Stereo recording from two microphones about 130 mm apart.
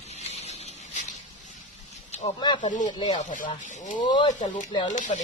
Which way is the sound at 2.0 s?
60° left (ahead or behind).